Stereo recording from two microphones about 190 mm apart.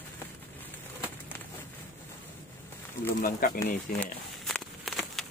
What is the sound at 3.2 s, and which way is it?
Speech, 50° left (ahead or behind).